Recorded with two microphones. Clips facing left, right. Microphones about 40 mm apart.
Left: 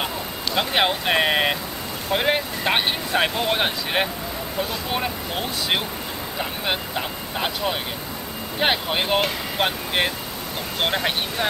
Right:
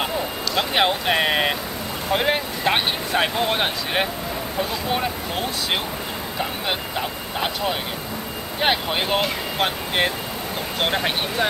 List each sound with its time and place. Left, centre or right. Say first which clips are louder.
0.6 s speech: right 1 dB; centre